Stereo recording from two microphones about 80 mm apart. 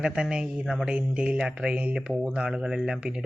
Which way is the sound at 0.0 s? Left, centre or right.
Centre.